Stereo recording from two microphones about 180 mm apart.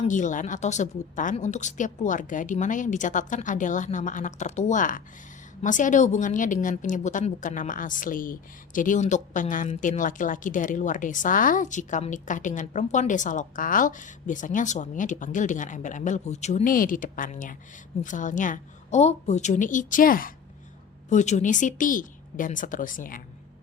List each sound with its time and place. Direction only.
0.0 s a woman's voice: 45° left (ahead or behind)